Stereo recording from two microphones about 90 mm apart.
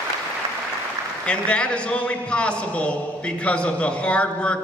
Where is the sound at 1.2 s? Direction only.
10° left (ahead or behind).